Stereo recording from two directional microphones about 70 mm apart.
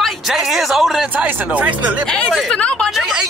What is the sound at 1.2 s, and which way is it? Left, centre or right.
Speech, right.